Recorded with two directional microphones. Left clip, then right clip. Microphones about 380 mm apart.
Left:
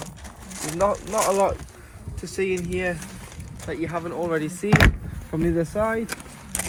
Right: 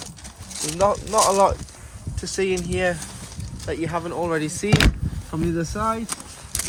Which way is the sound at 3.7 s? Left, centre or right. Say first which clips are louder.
Right 2 dB; right.